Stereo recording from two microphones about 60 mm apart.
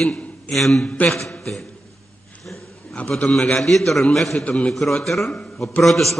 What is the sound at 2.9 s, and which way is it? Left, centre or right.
A man's voice, centre.